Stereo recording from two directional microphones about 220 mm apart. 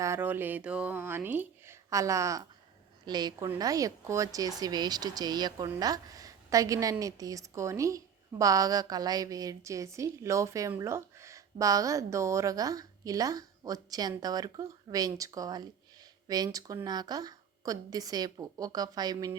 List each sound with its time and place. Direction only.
0.0 s a woman's voice: 10° right (ahead or behind)